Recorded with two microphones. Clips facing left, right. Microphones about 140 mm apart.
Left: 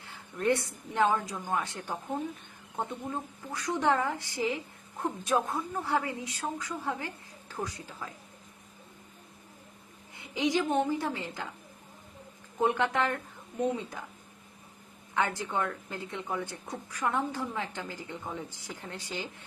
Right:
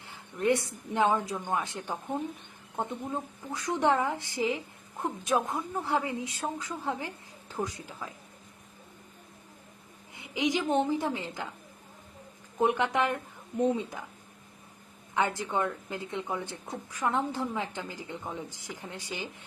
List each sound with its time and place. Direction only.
0.0 s a woman's voice: 15° right (ahead or behind)
10.2 s a woman's voice: 15° right (ahead or behind)
12.5 s a woman's voice: 15° right (ahead or behind)
15.1 s a woman's voice: 20° right (ahead or behind)